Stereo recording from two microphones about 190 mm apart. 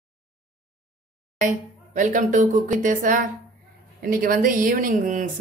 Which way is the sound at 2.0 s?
40° right (ahead or behind).